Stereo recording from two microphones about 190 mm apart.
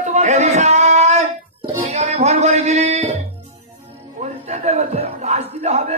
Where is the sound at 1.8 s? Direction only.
35° right (ahead or behind).